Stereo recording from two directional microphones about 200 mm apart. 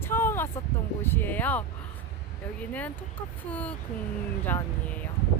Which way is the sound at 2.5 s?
5° left (ahead or behind).